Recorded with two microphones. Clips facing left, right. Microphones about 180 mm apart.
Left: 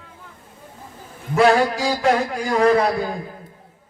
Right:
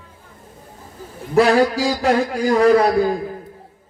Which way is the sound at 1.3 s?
35° right (ahead or behind).